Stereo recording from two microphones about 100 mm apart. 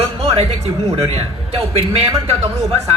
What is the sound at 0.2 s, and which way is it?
A man's voice, 80° right.